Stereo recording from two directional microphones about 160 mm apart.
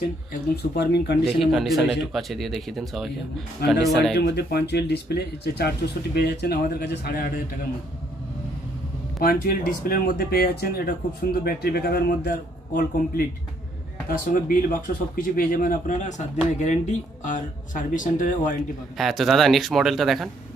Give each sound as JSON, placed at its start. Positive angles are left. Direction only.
{"t": 0.3, "sound": "speech", "side_deg": 90}
{"t": 1.4, "sound": "speech", "side_deg": 0}
{"t": 3.6, "sound": "speech", "side_deg": 90}
{"t": 9.2, "sound": "speech", "side_deg": 70}
{"t": 14.3, "sound": "a man's voice", "side_deg": 60}
{"t": 18.9, "sound": "speech", "side_deg": 0}